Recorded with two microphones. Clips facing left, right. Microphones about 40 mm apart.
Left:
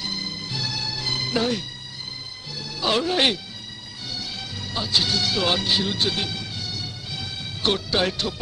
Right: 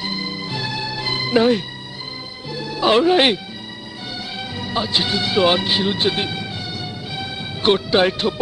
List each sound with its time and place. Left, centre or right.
0.0 s music: right
4.4 s music: right